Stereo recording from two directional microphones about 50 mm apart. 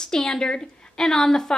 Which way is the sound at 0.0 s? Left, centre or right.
Centre.